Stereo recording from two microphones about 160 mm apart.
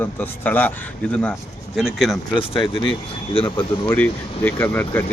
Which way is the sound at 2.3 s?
35° left (ahead or behind).